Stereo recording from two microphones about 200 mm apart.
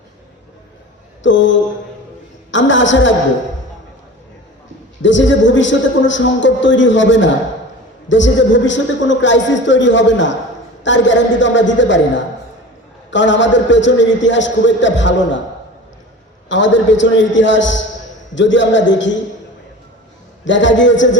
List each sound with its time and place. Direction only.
1.2 s a man's voice: 65° left (ahead or behind)
5.0 s a man's voice: 65° left (ahead or behind)
16.5 s a man's voice: 65° left (ahead or behind)
20.4 s a man's voice: 65° left (ahead or behind)